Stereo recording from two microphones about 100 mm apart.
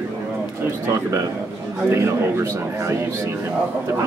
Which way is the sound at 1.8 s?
25° right (ahead or behind).